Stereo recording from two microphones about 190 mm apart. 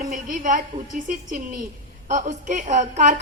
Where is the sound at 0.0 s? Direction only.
45° right (ahead or behind).